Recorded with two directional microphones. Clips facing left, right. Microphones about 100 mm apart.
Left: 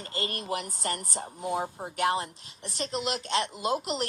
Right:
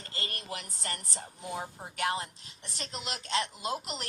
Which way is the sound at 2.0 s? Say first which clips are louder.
Left 5 dB; 45° left (ahead or behind).